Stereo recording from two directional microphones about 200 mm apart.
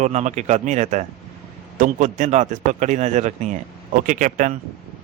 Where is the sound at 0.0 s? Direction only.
35° right (ahead or behind).